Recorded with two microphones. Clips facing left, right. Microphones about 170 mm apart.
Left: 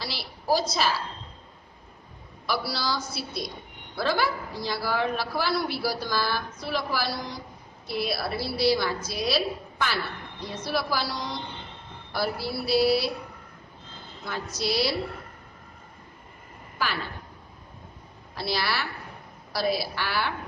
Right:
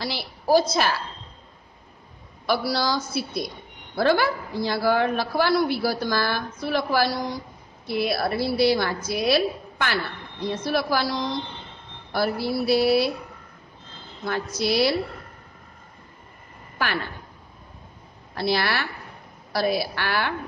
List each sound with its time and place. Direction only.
0.0 s a woman's voice: 55° right (ahead or behind)
2.4 s a woman's voice: 50° right (ahead or behind)
12.1 s a woman's voice: 55° right (ahead or behind)
14.2 s a woman's voice: 55° right (ahead or behind)
16.7 s a woman's voice: 60° right (ahead or behind)
18.3 s a woman's voice: 55° right (ahead or behind)